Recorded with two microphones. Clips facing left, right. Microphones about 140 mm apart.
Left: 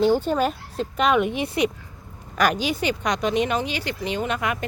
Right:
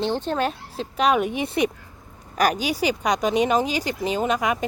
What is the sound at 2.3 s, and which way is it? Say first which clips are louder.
Speech: even; 40° right (ahead or behind).